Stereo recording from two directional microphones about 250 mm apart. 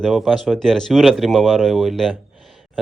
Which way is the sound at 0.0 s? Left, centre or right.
Centre.